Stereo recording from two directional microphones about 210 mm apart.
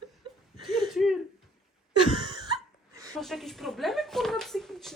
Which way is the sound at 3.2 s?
Centre (ahead or behind).